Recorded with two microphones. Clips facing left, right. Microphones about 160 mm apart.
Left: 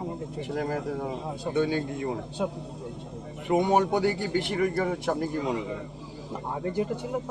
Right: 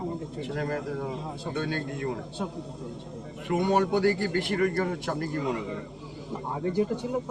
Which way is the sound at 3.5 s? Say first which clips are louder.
Left 2 dB; 20° left (ahead or behind).